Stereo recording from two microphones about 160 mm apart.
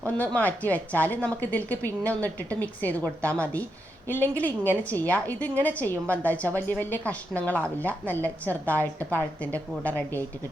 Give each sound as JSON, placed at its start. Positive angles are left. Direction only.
{"t": 0.0, "sound": "a woman's voice", "side_deg": 10}